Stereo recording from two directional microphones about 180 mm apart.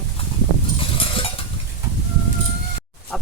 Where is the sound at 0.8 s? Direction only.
30° left (ahead or behind).